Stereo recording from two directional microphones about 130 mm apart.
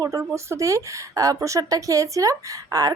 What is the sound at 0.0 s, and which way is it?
Speech, 25° right (ahead or behind).